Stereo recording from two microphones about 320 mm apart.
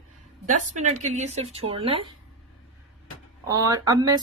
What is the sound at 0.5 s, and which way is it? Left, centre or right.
Speech, right.